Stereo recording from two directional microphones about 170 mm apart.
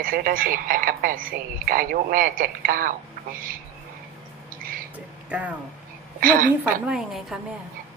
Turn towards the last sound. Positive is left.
turn(degrees=0)  # may be behind; listen again after turning